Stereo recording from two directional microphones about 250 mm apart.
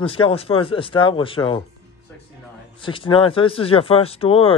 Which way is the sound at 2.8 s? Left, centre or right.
Left.